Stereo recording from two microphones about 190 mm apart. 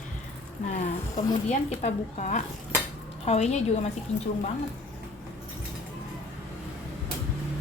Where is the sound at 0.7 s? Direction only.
35° left (ahead or behind).